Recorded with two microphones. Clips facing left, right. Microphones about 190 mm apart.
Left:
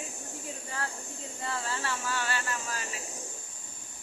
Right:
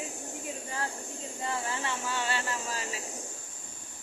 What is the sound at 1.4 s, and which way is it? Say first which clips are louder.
Speech: right 1 dB; 15° right (ahead or behind).